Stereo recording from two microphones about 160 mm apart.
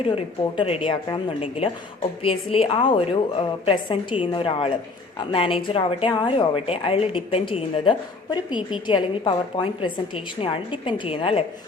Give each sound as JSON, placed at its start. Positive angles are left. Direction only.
{"t": 0.0, "sound": "a woman's voice", "side_deg": 35}